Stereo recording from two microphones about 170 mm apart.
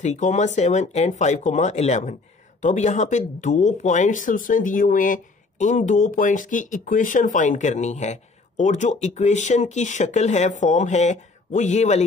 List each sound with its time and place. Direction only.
0.0 s speech: 45° left (ahead or behind)